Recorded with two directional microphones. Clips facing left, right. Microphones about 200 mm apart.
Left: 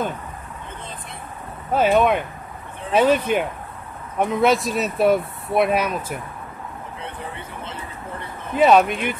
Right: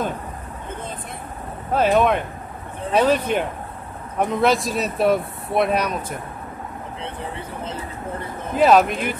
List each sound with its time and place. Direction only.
1.7 s speech: centre (ahead or behind)
8.5 s speech: centre (ahead or behind)